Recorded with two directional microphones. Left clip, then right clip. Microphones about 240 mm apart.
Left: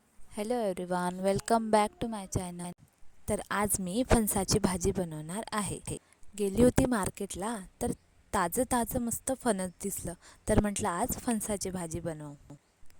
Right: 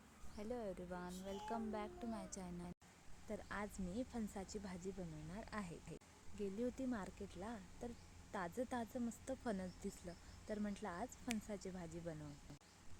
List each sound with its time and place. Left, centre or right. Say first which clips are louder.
0.3 s a woman's voice: left 16 dB; left